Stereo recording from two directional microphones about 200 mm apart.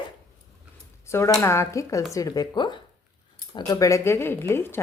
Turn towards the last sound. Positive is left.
turn(degrees=10)  # may be behind; listen again after turning